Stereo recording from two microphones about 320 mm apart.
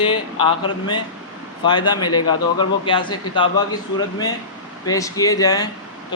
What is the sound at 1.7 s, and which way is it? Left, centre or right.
A man's voice, centre.